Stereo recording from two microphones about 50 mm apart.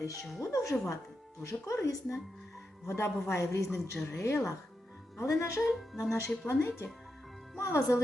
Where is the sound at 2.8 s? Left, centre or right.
Left.